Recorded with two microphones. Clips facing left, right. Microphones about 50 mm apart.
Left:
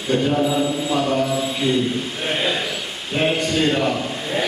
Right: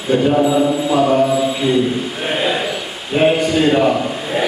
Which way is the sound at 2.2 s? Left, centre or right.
Centre.